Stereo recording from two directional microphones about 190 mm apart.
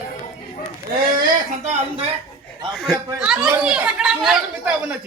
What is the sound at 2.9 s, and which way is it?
Speech, 5° right (ahead or behind).